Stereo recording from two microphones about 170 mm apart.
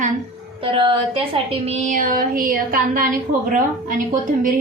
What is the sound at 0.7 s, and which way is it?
Speech, 30° right (ahead or behind).